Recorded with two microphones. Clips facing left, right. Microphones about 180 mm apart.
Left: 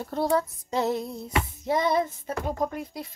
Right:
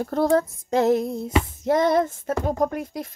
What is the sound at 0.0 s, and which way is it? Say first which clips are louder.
A woman's voice: right 5 dB; 50° right (ahead or behind).